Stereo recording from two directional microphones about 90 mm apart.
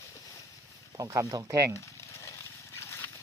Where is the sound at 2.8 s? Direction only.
30° left (ahead or behind).